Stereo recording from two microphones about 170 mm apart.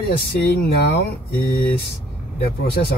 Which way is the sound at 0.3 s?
70° left (ahead or behind).